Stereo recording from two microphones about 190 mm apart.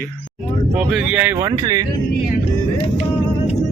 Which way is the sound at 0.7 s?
5° right (ahead or behind).